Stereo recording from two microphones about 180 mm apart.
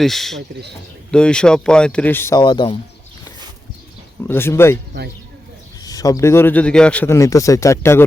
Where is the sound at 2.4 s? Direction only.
25° left (ahead or behind).